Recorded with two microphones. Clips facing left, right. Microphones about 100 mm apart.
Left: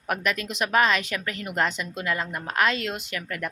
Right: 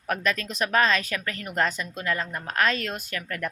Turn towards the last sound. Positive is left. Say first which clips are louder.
# even
turn(degrees=15)  # may be behind; listen again after turning